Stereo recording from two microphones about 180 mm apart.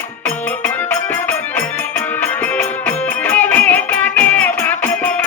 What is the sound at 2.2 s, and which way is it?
Music, 10° left (ahead or behind).